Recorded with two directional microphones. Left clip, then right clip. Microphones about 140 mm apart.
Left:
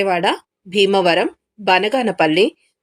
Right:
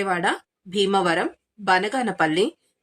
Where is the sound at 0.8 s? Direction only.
15° left (ahead or behind).